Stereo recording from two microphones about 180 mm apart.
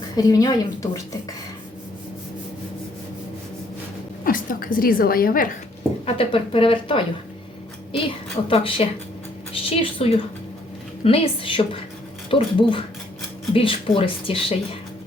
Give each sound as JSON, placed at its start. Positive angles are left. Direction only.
{"t": 0.2, "sound": "speech", "side_deg": 20}
{"t": 4.2, "sound": "a woman's voice", "side_deg": 50}
{"t": 6.1, "sound": "a woman's voice", "side_deg": 30}